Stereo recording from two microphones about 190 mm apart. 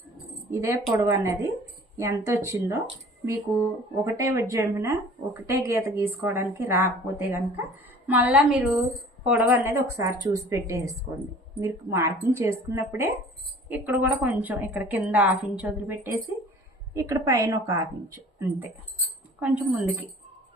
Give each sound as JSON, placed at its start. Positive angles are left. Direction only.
{"t": 0.5, "sound": "speech", "side_deg": -15}
{"t": 19.4, "sound": "speech", "side_deg": -10}